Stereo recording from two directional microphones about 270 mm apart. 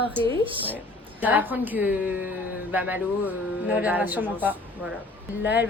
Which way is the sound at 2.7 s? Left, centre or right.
Centre.